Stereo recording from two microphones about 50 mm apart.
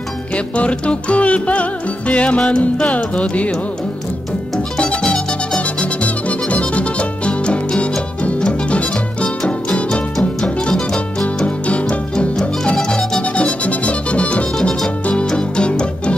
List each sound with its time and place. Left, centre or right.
0.6 s music: left
4.7 s music: centre
5.6 s music: left
12.4 s music: centre